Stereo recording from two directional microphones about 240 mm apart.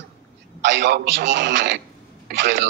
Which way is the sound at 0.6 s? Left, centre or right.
Right.